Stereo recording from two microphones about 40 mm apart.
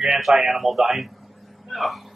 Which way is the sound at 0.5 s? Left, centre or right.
Centre.